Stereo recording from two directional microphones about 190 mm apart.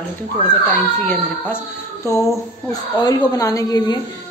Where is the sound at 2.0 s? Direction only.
15° left (ahead or behind).